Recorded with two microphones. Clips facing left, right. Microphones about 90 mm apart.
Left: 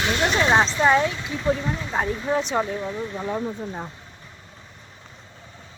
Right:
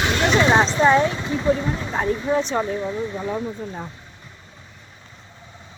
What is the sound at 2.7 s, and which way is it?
Speech, 5° right (ahead or behind).